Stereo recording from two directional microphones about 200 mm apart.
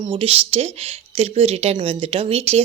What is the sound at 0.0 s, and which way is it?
Speech, 25° right (ahead or behind).